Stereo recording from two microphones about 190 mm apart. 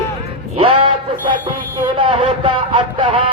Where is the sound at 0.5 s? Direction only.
25° right (ahead or behind).